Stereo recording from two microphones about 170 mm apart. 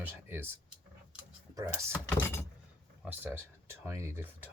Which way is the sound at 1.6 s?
20° right (ahead or behind).